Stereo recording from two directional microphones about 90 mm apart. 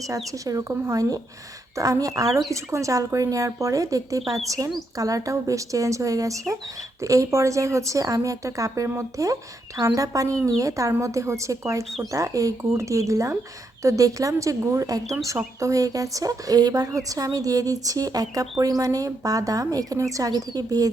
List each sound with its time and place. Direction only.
0.3 s a woman's voice: 40° right (ahead or behind)